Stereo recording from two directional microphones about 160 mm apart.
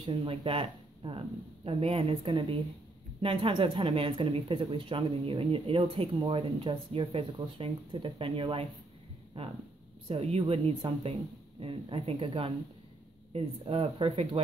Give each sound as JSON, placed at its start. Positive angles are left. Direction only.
{"t": 0.0, "sound": "speech", "side_deg": -35}